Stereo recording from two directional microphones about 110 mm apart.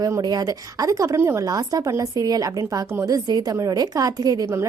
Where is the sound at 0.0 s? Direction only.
35° right (ahead or behind).